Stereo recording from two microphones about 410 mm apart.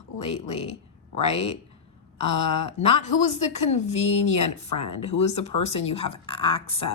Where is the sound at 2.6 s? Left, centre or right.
Centre.